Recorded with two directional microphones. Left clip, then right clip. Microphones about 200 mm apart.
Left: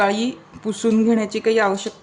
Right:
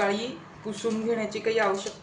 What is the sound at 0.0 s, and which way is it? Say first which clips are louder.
Speech: left 8 dB; 55° left (ahead or behind).